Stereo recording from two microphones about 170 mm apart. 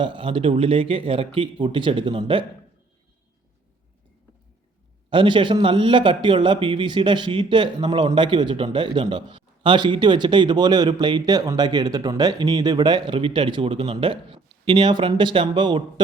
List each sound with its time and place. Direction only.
0.0 s speech: 30° right (ahead or behind)
5.1 s a man's voice: 30° right (ahead or behind)